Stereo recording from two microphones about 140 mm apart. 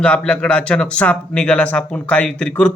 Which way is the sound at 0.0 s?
5° left (ahead or behind).